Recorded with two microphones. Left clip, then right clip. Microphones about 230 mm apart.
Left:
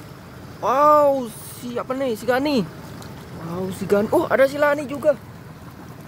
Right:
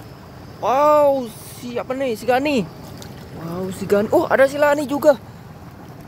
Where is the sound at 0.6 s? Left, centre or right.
Centre.